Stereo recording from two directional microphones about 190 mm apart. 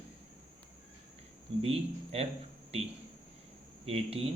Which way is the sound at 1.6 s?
30° right (ahead or behind).